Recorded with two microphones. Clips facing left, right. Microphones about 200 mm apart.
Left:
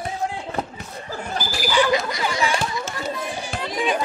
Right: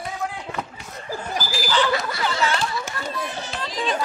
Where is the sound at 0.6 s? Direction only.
35° left (ahead or behind).